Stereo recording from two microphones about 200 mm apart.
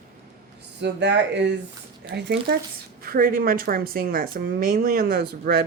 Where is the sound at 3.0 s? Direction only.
45° right (ahead or behind).